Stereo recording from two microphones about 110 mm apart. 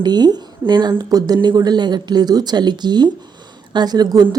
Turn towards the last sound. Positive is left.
turn(degrees=-35)  # may be behind; listen again after turning